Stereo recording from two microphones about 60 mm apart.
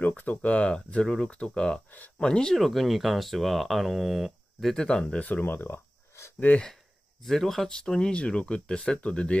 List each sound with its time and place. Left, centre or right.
0.0 s speech: left; by 2.5 s centre
2.5 s speech: centre
4.8 s speech: centre
5.4 s speech: left
7.2 s speech: centre